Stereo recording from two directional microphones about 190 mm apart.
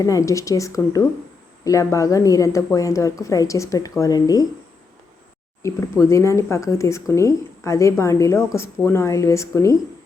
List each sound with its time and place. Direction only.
0.0 s speech: 15° left (ahead or behind)
5.6 s speech: 15° left (ahead or behind)